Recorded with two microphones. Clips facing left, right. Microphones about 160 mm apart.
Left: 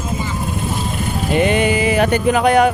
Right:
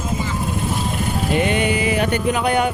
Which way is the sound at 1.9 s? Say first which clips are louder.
Left 4 dB; 90° left.